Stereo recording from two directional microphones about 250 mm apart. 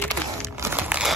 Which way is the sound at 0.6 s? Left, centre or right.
Centre.